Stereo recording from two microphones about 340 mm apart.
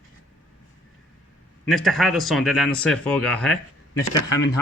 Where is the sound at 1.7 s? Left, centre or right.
Centre.